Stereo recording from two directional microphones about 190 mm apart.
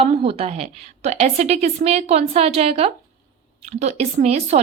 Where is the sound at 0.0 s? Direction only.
30° right (ahead or behind).